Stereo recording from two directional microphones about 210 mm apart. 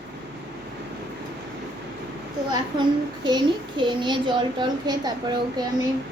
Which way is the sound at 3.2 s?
20° right (ahead or behind).